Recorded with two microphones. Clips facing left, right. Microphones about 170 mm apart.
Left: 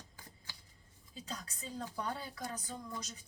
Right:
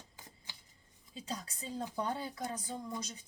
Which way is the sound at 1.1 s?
30° right (ahead or behind).